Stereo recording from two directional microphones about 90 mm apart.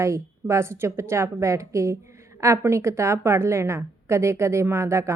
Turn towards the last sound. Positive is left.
turn(degrees=-30)  # may be behind; listen again after turning